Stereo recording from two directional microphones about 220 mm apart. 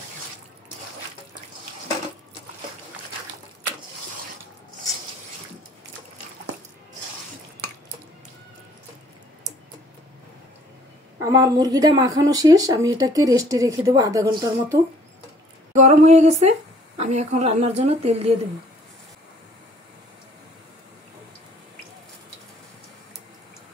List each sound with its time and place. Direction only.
11.2 s speech: 15° right (ahead or behind)
15.7 s speech: 30° right (ahead or behind)